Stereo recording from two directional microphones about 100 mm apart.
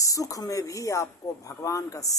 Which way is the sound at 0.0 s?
35° left (ahead or behind).